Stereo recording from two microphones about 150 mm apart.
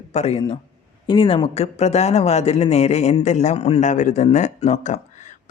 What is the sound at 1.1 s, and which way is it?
A man's voice, 35° left (ahead or behind).